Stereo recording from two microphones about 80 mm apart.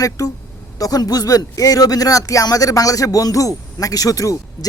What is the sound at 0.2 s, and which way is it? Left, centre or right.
Speech, left.